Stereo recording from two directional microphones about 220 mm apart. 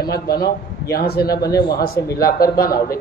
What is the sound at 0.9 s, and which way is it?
Speech, 45° left (ahead or behind).